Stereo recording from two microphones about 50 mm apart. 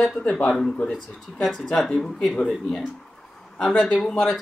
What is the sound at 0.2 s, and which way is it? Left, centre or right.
Speech, left.